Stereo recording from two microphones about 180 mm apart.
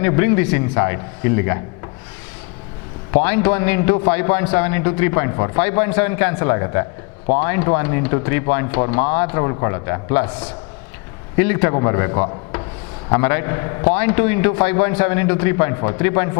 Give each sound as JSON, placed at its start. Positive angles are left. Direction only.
{"t": 0.0, "sound": "a man's voice", "side_deg": 15}
{"t": 3.1, "sound": "a man's voice", "side_deg": 15}
{"t": 11.3, "sound": "a man's voice", "side_deg": 15}